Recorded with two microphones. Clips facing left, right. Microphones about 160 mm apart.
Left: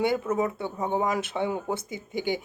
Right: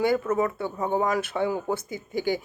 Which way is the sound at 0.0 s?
20° left (ahead or behind).